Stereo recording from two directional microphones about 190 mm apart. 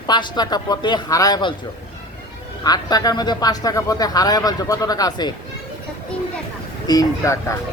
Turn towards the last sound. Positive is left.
turn(degrees=15)  # may be behind; listen again after turning